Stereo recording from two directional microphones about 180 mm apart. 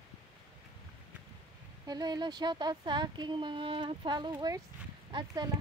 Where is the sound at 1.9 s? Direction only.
25° right (ahead or behind).